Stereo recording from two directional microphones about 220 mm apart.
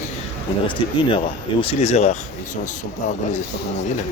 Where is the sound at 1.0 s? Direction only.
25° left (ahead or behind).